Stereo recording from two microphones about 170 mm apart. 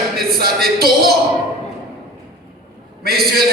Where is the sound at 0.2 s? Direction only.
65° right (ahead or behind).